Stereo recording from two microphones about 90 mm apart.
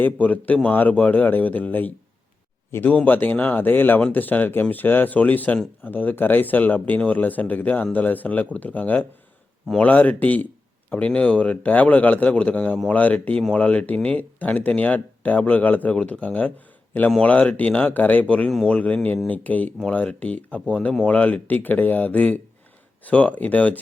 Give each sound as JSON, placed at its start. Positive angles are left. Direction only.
{"t": 0.0, "sound": "speech", "side_deg": 15}